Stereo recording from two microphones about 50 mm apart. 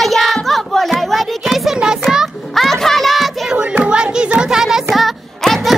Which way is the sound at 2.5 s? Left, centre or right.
Centre.